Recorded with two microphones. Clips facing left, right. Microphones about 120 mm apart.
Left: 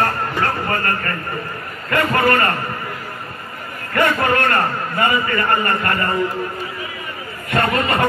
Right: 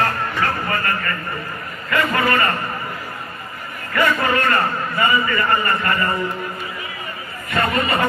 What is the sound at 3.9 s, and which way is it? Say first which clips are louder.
A man's voice: left 1 dB; 55° left (ahead or behind).